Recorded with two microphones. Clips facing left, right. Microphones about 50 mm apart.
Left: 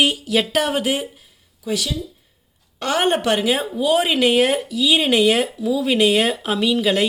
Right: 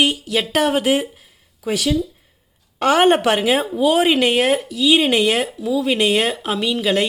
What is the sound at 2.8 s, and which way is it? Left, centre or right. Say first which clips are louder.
A woman's voice: right 5 dB; right.